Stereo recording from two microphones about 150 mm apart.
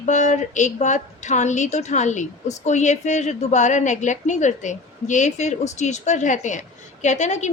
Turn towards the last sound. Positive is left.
turn(degrees=50)  # may be behind; listen again after turning